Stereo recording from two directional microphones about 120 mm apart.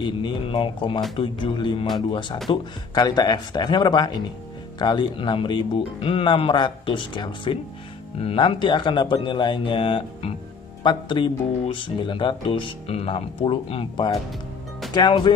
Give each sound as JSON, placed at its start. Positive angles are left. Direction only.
{"t": 0.0, "sound": "speech", "side_deg": 45}